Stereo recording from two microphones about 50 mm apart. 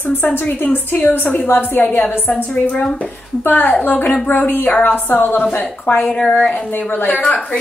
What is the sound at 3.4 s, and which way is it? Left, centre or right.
A woman's voice, left.